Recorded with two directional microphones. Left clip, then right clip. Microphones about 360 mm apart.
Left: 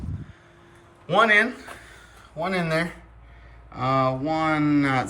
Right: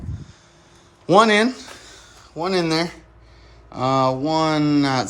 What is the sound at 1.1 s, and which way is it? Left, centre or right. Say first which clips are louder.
A man's voice: right 4 dB; centre.